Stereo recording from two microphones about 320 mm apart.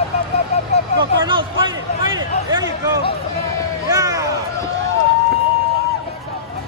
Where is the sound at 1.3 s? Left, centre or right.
Centre.